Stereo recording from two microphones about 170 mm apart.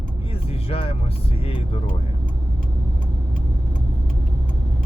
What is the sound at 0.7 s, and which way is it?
Speech, 35° left (ahead or behind).